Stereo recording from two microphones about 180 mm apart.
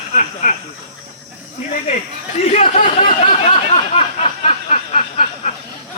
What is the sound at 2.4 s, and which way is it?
Speech, 35° left (ahead or behind).